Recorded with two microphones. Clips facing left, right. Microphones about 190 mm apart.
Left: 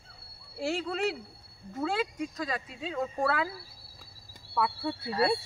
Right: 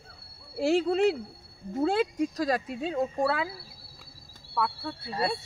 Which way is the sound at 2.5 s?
65° right (ahead or behind).